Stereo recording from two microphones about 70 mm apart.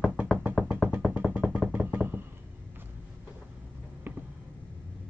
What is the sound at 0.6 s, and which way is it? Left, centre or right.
Music, centre.